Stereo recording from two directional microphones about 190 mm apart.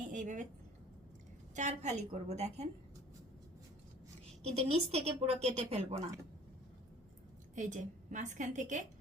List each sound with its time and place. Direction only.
0.0 s a sound: 40° right (ahead or behind)
1.5 s speech: 40° right (ahead or behind)
4.6 s speech: 35° right (ahead or behind)
7.5 s speech: 40° right (ahead or behind)